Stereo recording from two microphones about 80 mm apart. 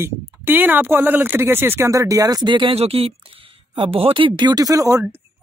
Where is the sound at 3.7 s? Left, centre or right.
Right.